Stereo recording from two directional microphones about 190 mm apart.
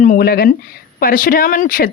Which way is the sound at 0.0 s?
50° left (ahead or behind).